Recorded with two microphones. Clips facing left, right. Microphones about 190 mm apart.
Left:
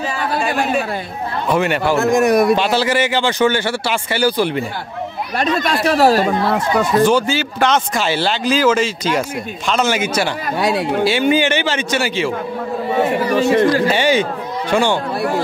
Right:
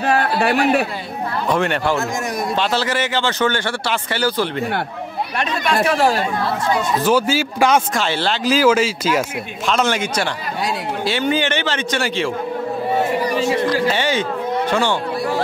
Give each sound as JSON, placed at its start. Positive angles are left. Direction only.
{"t": 0.0, "sound": "a sound", "side_deg": -65}
{"t": 1.5, "sound": "speech", "side_deg": 5}
{"t": 2.0, "sound": "a man's voice", "side_deg": 65}
{"t": 2.5, "sound": "speech", "side_deg": 10}
{"t": 5.4, "sound": "speech", "side_deg": 40}
{"t": 7.0, "sound": "speech", "side_deg": -5}
{"t": 7.9, "sound": "speech", "side_deg": 5}
{"t": 8.5, "sound": "speech", "side_deg": -5}
{"t": 13.4, "sound": "a man's voice", "side_deg": 60}
{"t": 13.9, "sound": "speech", "side_deg": 10}